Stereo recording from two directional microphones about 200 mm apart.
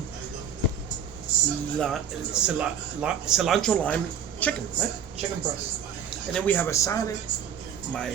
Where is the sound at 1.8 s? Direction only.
Centre (ahead or behind).